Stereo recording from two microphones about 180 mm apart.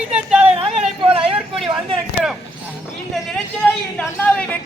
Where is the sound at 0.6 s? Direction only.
35° right (ahead or behind).